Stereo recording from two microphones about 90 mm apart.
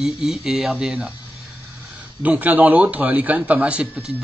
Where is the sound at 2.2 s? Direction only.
15° right (ahead or behind).